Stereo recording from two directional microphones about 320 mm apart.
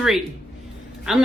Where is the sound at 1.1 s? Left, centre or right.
Centre.